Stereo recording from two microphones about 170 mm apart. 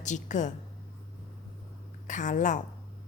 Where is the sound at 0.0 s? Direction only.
45° left (ahead or behind).